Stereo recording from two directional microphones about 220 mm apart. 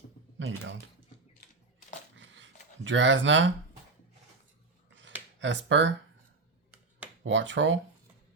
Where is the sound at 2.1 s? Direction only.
60° right (ahead or behind).